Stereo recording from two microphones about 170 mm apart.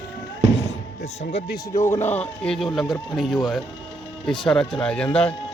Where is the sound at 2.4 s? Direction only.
Centre (ahead or behind).